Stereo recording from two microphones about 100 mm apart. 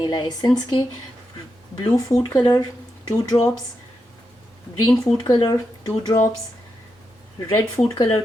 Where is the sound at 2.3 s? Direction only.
40° left (ahead or behind).